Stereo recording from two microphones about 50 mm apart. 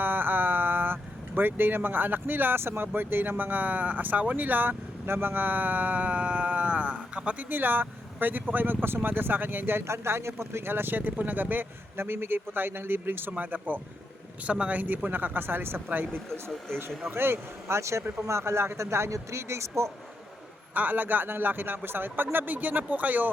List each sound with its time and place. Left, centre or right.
0.0 s a sound: right
1.4 s speech: right
5.0 s speech: right
7.5 s speech: right
9.8 s speech: right
11.9 s speech: right
14.4 s speech: right
16.3 s speech: centre
17.1 s speech: right
20.7 s speech: right